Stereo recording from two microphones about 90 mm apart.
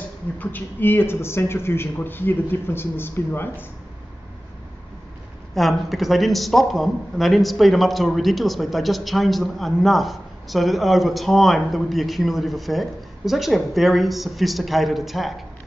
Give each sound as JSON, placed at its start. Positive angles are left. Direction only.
{"t": 0.4, "sound": "a man's voice", "side_deg": 20}
{"t": 5.5, "sound": "a man's voice", "side_deg": 0}